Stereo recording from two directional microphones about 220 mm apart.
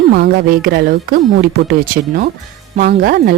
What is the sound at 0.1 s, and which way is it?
Speech, 45° right (ahead or behind).